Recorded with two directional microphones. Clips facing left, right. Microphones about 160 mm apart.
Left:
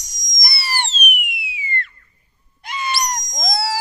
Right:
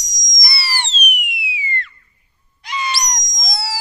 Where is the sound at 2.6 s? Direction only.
50° left (ahead or behind).